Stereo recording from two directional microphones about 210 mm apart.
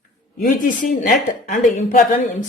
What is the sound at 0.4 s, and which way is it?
Speech, 40° left (ahead or behind).